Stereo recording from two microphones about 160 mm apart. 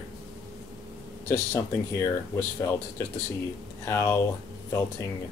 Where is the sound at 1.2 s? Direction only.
15° left (ahead or behind).